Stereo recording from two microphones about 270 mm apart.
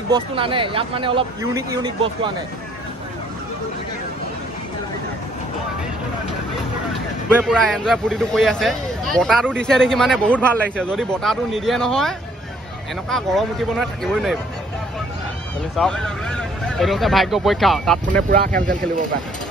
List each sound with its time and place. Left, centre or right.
0.1 s speech: centre
7.3 s speech: centre
15.7 s speech: centre
18.3 s speech: right